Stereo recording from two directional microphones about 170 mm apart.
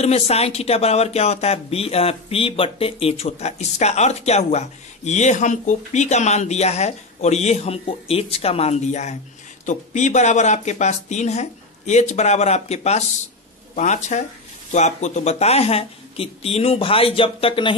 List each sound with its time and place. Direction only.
0.0 s speech: 40° left (ahead or behind)